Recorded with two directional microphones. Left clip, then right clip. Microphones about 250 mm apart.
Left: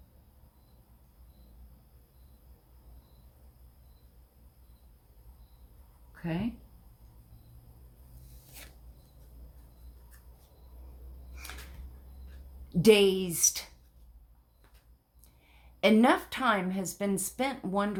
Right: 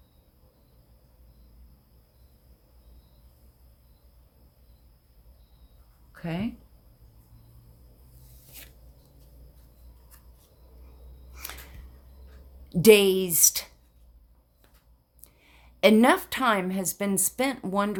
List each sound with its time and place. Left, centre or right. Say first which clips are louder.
6.2 s a woman's voice: right 2 dB; right
11.4 s a sound: right 4 dB; right
12.6 s a woman's voice: right 5 dB; right
15.4 s a woman's voice: right 6 dB; right